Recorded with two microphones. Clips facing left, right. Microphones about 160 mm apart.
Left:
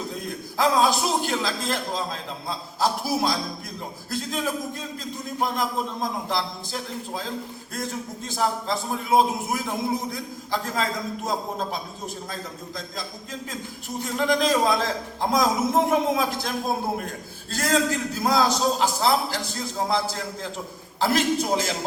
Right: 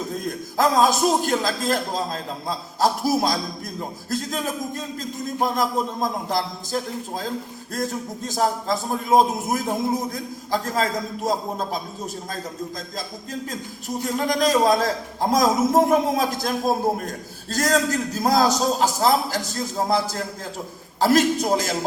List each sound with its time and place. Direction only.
0.1 s a man's voice: 45° right (ahead or behind)
13.5 s a man's voice: 40° right (ahead or behind)